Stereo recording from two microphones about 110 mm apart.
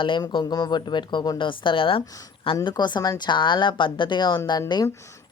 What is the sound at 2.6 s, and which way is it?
Speech, 40° left (ahead or behind).